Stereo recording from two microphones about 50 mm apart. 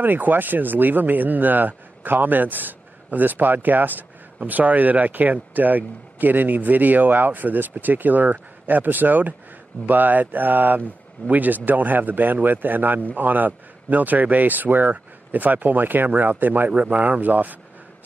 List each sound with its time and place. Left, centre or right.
0.0 s speech: right